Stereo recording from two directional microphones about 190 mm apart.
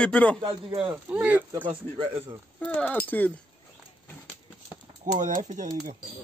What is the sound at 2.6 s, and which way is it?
Speech, 10° left (ahead or behind).